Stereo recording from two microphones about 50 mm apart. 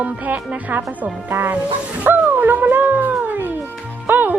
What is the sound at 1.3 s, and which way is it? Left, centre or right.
Speech, right.